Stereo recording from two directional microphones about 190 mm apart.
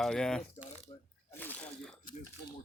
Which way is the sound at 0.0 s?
5° left (ahead or behind).